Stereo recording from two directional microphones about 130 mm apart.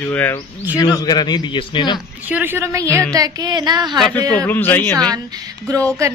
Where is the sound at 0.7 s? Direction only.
30° left (ahead or behind).